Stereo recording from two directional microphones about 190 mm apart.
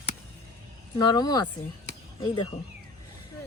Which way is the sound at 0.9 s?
20° left (ahead or behind).